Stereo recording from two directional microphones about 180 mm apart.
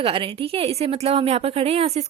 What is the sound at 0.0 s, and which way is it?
A woman's voice, 30° right (ahead or behind).